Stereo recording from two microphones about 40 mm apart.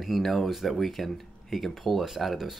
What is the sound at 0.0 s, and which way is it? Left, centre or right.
Speech, centre.